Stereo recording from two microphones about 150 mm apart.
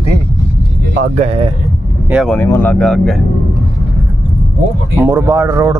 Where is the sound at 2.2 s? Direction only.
15° left (ahead or behind).